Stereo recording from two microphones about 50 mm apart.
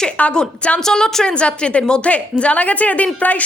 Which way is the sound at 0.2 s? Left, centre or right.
Left.